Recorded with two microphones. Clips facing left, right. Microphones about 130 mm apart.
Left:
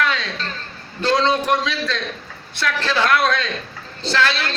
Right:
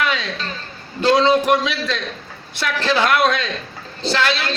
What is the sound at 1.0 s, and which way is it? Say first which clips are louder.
A man's voice: right 4 dB; 15° right (ahead or behind).